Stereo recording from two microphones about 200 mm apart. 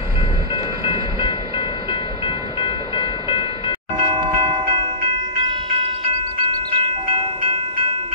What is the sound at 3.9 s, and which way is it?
Train, 25° right (ahead or behind).